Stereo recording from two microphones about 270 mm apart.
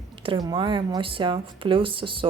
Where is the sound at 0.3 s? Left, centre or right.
Centre.